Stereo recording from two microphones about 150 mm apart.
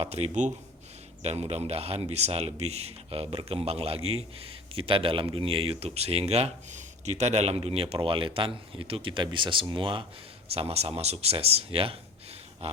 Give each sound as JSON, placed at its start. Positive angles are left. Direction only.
{"t": 0.0, "sound": "speech", "side_deg": -45}